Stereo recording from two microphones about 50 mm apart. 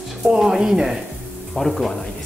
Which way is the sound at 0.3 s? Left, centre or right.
Centre.